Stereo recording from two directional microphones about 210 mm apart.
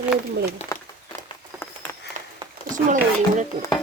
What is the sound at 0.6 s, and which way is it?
Speech, 30° left (ahead or behind).